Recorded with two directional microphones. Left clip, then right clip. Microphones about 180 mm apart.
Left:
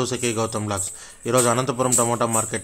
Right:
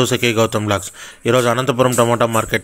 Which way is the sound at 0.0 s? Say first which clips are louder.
Right 8 dB; 25° right (ahead or behind).